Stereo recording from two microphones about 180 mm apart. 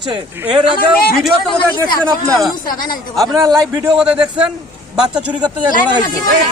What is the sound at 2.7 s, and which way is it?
Speech, 50° left (ahead or behind).